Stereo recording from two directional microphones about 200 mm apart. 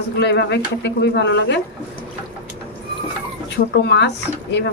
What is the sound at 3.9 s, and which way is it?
Speech, 60° left (ahead or behind).